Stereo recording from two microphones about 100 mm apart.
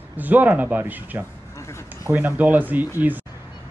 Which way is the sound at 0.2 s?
15° right (ahead or behind).